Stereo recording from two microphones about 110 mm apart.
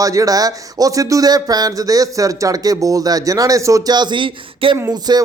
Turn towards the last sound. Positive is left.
turn(degrees=-40)  # may be behind; listen again after turning